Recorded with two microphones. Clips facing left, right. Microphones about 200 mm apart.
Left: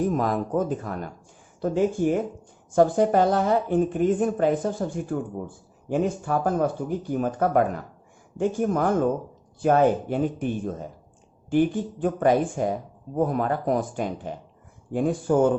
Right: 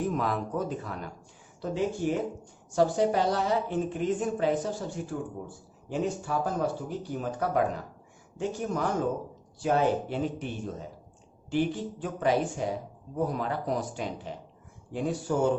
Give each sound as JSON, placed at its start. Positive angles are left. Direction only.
{"t": 0.0, "sound": "a woman's voice", "side_deg": 45}